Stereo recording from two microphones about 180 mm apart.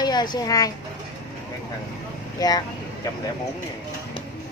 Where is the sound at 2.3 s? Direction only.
20° left (ahead or behind).